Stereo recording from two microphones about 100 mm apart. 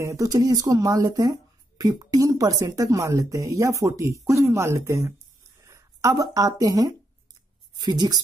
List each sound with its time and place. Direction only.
0.0 s speech: 35° right (ahead or behind)